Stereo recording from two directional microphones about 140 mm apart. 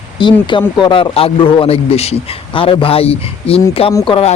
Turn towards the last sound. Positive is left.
turn(degrees=45)  # may be behind; listen again after turning